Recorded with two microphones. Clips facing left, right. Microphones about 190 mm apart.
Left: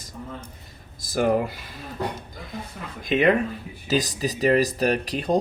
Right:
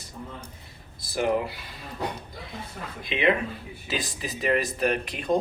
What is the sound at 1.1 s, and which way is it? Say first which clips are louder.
Speech: left 4 dB; 45° left (ahead or behind).